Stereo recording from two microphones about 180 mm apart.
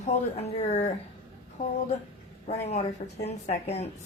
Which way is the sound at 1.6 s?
50° left (ahead or behind).